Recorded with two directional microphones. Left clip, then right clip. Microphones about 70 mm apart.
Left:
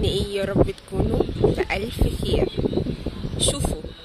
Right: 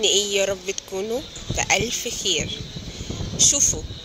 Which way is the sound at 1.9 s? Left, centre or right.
Left.